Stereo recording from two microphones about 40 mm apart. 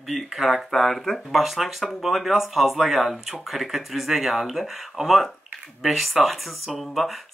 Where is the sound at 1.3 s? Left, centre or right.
Centre.